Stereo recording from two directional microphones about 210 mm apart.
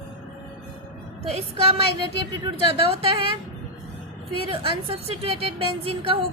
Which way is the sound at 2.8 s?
25° right (ahead or behind).